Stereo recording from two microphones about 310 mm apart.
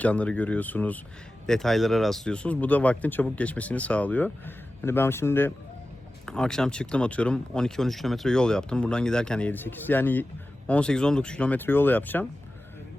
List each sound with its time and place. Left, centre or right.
0.0 s speech: centre